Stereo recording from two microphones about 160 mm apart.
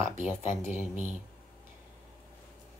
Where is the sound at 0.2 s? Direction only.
10° right (ahead or behind).